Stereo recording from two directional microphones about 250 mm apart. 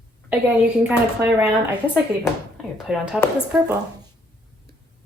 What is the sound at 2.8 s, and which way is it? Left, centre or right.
Speech, centre.